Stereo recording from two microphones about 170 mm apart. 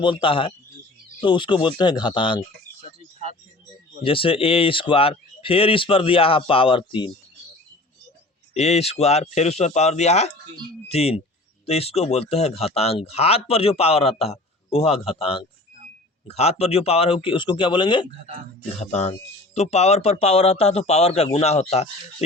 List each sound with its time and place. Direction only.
0.0 s speech: 30° left (ahead or behind)
4.0 s speech: 30° left (ahead or behind)
8.5 s speech: 40° left (ahead or behind)
18.8 s speech: 40° left (ahead or behind)